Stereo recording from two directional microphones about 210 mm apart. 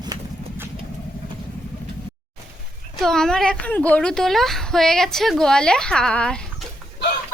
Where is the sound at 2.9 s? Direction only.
Centre (ahead or behind).